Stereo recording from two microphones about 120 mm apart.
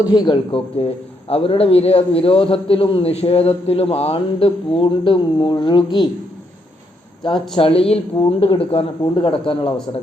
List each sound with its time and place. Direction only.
0.1 s speech: 40° left (ahead or behind)
1.3 s a man's voice: 55° left (ahead or behind)
7.2 s a man's voice: 40° left (ahead or behind)